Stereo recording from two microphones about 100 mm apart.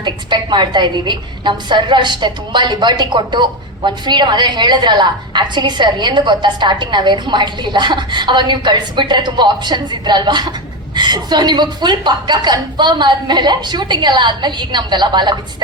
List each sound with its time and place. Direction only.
0.0 s a woman's voice: 50° right (ahead or behind)